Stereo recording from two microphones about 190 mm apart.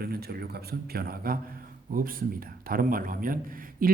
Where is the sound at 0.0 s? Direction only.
55° right (ahead or behind).